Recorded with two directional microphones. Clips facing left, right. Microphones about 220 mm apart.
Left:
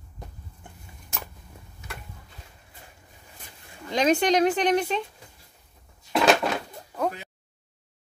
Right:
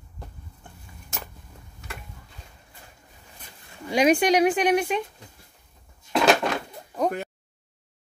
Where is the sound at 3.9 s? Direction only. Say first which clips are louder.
Right 2 dB; 10° right (ahead or behind).